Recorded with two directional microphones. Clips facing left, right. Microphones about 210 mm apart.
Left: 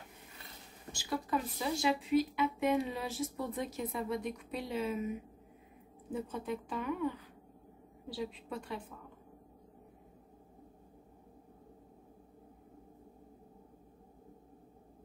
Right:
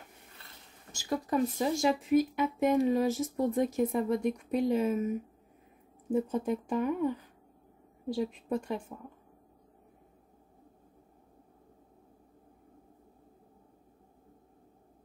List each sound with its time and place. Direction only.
0.9 s a woman's voice: 45° right (ahead or behind)